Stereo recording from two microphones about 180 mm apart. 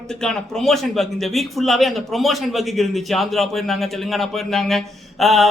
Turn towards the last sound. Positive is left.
turn(degrees=0)  # may be behind; listen again after turning